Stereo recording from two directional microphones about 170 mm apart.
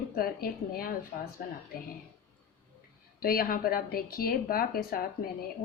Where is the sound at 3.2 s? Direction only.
60° left (ahead or behind).